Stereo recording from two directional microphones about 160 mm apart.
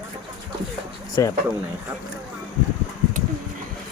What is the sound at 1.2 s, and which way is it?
Speech, 20° left (ahead or behind).